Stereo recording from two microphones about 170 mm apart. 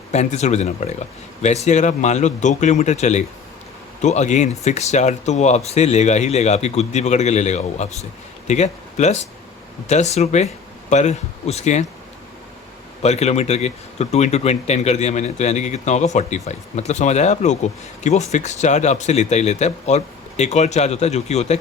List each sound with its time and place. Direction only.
0.1 s speech: 40° left (ahead or behind)
13.0 s speech: 40° left (ahead or behind)